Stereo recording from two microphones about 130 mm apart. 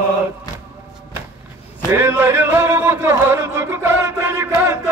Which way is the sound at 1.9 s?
20° right (ahead or behind).